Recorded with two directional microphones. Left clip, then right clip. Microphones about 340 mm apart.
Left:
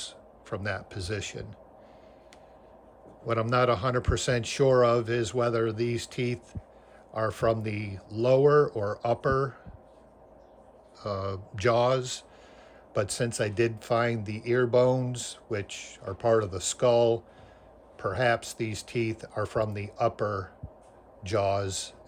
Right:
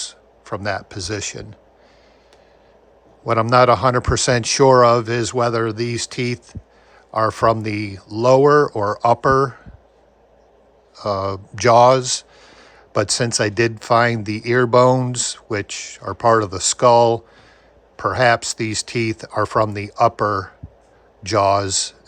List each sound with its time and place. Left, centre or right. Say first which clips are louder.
0.0 s speech: right 9 dB; centre
3.2 s a man's voice: right 12 dB; centre
11.0 s a man's voice: right 12 dB; centre